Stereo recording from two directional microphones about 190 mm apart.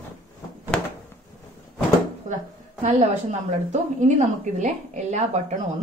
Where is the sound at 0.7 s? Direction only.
5° left (ahead or behind).